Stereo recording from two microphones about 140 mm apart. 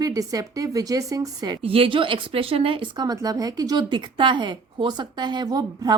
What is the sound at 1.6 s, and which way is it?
Speech, 40° right (ahead or behind).